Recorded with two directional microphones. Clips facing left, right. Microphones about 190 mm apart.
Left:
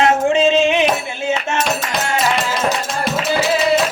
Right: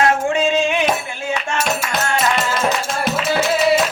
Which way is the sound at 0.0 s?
20° left (ahead or behind).